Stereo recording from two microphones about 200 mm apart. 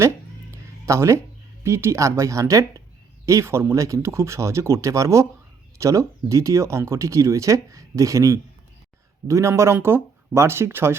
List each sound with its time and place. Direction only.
0.9 s speech: 15° right (ahead or behind)